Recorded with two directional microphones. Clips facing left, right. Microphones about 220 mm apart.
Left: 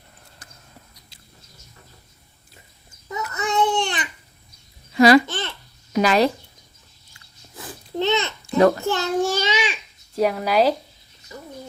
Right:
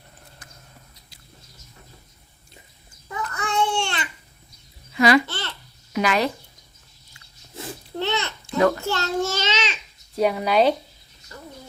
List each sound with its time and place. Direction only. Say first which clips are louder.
3.3 s babbling: left 3 dB; 20° left (ahead or behind)
4.9 s babbling: left 5 dB; 35° left (ahead or behind)
5.2 s babbling: left 3 dB; 20° left (ahead or behind)
5.9 s speech: left 4 dB; 35° left (ahead or behind)
7.9 s babbling: left 5 dB; 15° left (ahead or behind)
8.8 s a child's voice: left 3 dB; 15° left (ahead or behind)
10.2 s speech: even; centre (ahead or behind)
11.3 s a sound: left 3 dB; 10° left (ahead or behind)